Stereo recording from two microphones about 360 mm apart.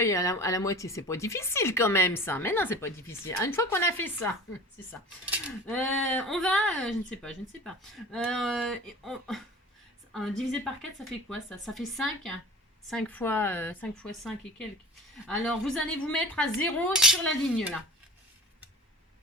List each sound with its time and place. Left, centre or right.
0.0 s speech: centre
4.9 s cutlery: centre